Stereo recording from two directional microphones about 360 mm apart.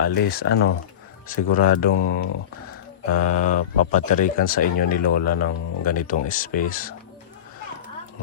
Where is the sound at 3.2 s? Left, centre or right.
Left.